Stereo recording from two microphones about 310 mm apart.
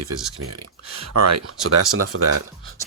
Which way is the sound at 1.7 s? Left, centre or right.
Right.